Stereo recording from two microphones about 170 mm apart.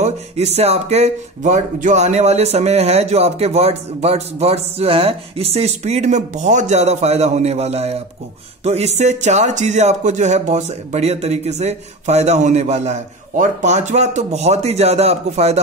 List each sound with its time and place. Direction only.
0.0 s speech: 40° right (ahead or behind)